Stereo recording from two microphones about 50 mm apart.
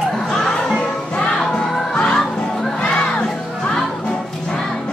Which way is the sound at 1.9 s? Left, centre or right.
Centre.